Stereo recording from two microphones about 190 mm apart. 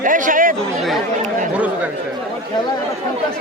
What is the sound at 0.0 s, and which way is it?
Chatter, 45° right (ahead or behind).